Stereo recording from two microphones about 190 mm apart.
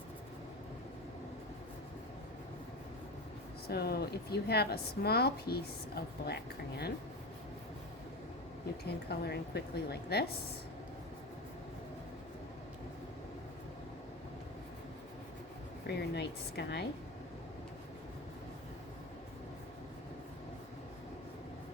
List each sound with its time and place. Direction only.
3.7 s speech: 60° left (ahead or behind)
8.8 s speech: 60° left (ahead or behind)
15.9 s speech: 60° left (ahead or behind)